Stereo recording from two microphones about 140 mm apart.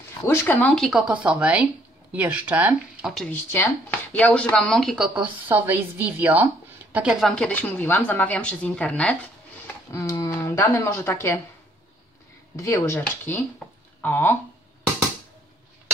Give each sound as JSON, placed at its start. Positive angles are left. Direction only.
{"t": 0.3, "sound": "speech", "side_deg": 15}
{"t": 3.3, "sound": "speech", "side_deg": 15}
{"t": 9.8, "sound": "speech", "side_deg": 20}
{"t": 12.5, "sound": "speech", "side_deg": 20}